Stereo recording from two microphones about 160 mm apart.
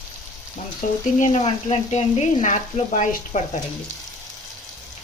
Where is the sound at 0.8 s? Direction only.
55° left (ahead or behind).